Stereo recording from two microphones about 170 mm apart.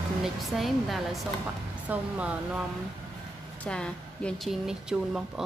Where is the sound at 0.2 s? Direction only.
Centre (ahead or behind).